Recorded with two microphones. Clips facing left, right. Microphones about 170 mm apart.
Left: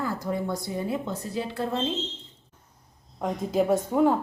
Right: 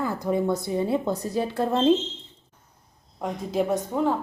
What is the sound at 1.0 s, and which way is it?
Speech, 40° right (ahead or behind).